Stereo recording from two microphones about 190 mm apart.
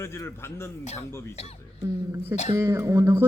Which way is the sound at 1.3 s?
35° left (ahead or behind).